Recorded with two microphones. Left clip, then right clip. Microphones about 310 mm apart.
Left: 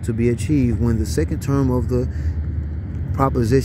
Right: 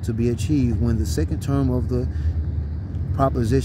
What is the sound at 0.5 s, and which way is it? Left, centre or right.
Speech, centre.